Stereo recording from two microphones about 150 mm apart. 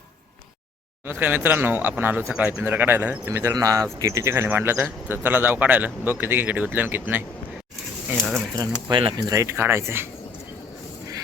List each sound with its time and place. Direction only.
1.0 s speech: 15° right (ahead or behind)
8.5 s speech: 35° right (ahead or behind)
9.3 s speech: 20° right (ahead or behind)